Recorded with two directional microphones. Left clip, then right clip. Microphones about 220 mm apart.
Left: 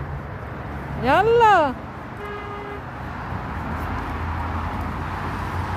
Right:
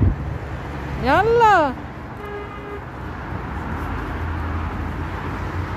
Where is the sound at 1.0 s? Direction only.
Centre (ahead or behind).